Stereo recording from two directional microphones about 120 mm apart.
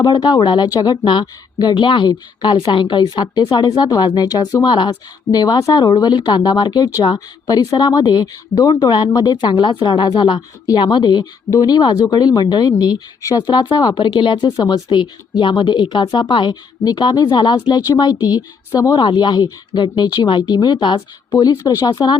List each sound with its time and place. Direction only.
0.0 s speech: 35° left (ahead or behind)